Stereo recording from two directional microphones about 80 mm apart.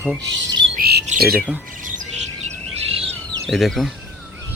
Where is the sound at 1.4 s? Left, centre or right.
Centre.